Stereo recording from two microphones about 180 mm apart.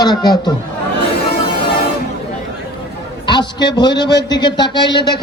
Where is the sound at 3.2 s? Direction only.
25° left (ahead or behind).